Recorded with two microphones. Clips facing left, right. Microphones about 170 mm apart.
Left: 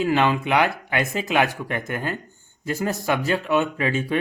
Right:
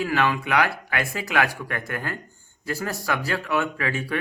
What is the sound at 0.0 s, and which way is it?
Speech, 25° left (ahead or behind).